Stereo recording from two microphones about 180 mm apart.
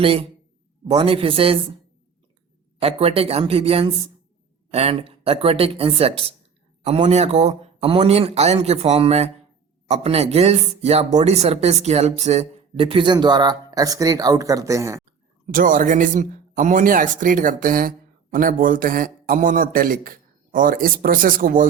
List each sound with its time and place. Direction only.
0.0 s speech: 30° right (ahead or behind)
2.8 s speech: 35° right (ahead or behind); by 15.0 s 15° right (ahead or behind)
15.4 s speech: 50° right (ahead or behind)